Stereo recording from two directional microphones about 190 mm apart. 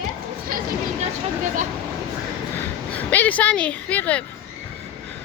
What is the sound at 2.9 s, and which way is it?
Speech, 10° left (ahead or behind).